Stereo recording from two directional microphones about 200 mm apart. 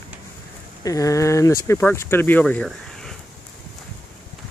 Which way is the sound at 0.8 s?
15° left (ahead or behind).